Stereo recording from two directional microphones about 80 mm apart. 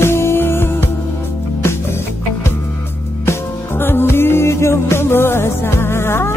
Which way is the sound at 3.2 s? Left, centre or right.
Left.